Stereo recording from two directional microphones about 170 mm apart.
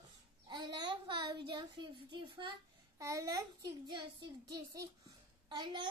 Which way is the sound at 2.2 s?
30° right (ahead or behind).